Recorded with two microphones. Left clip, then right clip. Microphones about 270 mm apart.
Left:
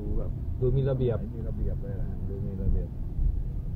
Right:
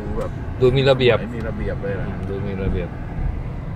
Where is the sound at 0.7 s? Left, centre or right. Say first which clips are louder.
Right 14 dB; centre.